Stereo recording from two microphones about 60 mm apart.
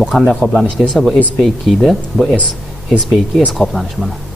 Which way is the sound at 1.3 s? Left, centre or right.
Centre.